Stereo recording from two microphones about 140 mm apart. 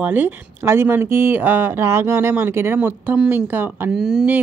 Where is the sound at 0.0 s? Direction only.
10° right (ahead or behind).